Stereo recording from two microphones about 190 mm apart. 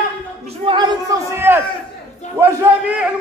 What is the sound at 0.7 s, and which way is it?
Speech, 25° right (ahead or behind).